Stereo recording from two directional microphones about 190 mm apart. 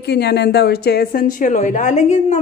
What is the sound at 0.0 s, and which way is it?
Speech, 60° left (ahead or behind).